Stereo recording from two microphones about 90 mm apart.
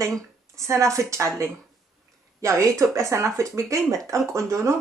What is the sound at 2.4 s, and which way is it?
Speech, 35° right (ahead or behind).